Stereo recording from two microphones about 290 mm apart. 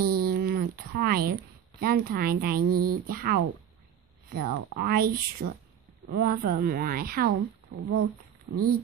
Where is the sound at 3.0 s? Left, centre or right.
Right.